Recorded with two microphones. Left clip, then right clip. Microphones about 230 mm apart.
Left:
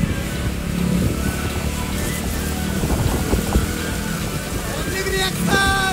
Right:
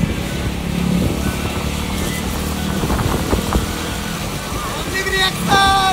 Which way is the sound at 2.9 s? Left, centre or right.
Left.